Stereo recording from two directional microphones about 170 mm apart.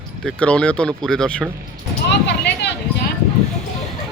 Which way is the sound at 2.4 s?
80° left.